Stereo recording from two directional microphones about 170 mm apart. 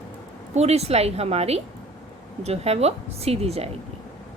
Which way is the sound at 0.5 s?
40° right (ahead or behind).